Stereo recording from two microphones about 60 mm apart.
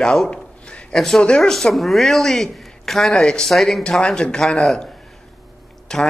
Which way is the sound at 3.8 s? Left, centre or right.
Centre.